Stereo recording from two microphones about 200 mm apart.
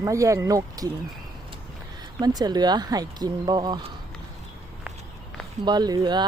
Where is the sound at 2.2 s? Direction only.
20° right (ahead or behind).